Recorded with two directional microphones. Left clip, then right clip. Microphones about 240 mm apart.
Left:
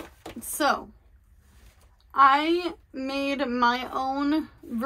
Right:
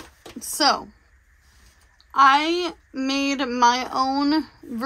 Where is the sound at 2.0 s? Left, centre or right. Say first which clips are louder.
Right 3 dB; centre.